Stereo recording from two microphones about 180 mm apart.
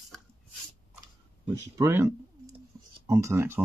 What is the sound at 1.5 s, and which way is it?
Speech, 15° right (ahead or behind).